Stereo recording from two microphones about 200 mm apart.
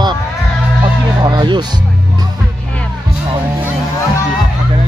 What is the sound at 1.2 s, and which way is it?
Speech, 20° right (ahead or behind).